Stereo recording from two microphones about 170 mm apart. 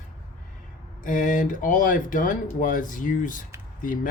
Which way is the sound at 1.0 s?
50° left (ahead or behind).